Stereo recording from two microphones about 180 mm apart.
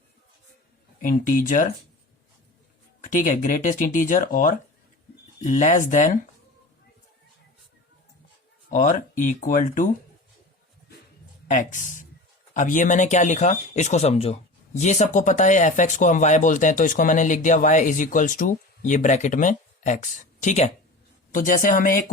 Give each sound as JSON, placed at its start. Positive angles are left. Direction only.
{"t": 1.0, "sound": "speech", "side_deg": 50}
{"t": 3.0, "sound": "speech", "side_deg": 45}
{"t": 8.7, "sound": "speech", "side_deg": 45}
{"t": 11.4, "sound": "speech", "side_deg": 45}